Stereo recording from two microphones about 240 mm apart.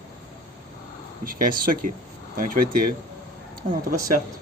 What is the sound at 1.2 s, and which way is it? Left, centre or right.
Speech, right.